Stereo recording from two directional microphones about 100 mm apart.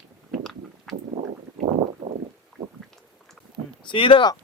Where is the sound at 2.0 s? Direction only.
75° right (ahead or behind).